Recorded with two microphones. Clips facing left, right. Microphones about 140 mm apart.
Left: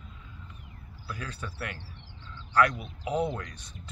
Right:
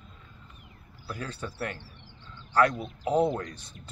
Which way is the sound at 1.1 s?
30° right (ahead or behind).